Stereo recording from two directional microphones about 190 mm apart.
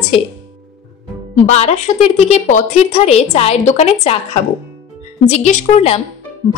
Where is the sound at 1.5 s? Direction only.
35° left (ahead or behind).